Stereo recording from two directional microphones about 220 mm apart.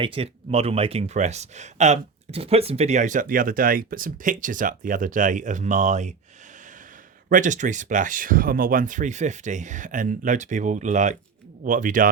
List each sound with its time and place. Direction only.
0.0 s speech: 25° right (ahead or behind)
7.3 s speech: 35° right (ahead or behind)